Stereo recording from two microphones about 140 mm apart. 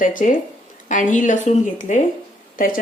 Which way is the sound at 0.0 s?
75° left (ahead or behind).